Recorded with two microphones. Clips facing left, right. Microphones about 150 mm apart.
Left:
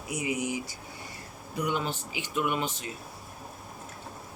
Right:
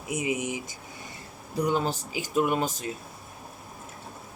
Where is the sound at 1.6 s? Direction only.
35° right (ahead or behind).